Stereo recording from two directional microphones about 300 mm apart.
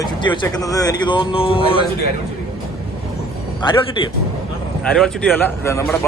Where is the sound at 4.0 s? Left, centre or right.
Centre.